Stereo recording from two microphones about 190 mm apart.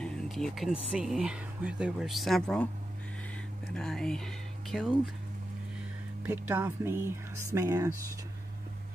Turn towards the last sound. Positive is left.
turn(degrees=-15)  # may be behind; listen again after turning